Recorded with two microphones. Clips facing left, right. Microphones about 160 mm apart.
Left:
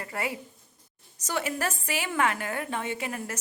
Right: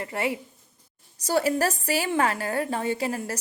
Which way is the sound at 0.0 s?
25° right (ahead or behind).